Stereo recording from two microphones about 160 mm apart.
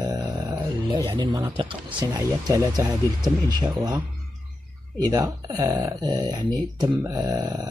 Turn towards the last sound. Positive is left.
turn(degrees=-25)  # may be behind; listen again after turning